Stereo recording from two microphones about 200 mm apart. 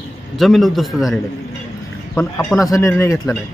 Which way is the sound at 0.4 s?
Centre (ahead or behind).